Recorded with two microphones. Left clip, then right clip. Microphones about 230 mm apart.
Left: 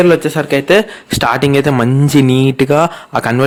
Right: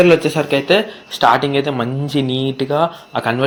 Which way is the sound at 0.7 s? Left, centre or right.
Left.